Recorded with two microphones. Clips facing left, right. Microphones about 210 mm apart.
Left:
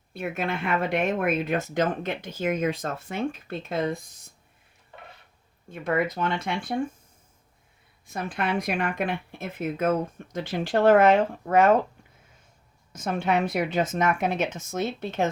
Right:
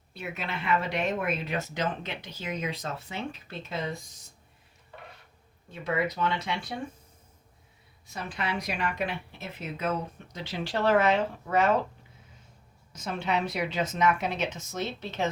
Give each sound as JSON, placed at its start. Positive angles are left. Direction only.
{"t": 0.1, "sound": "speech", "side_deg": 50}
{"t": 5.7, "sound": "speech", "side_deg": 50}
{"t": 8.0, "sound": "speech", "side_deg": 50}
{"t": 12.9, "sound": "speech", "side_deg": 50}